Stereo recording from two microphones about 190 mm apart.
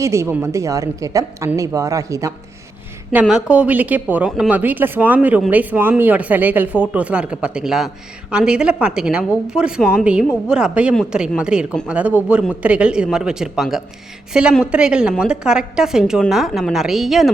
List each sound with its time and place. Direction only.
0.0 s speech: 15° right (ahead or behind)
3.1 s speech: 5° right (ahead or behind)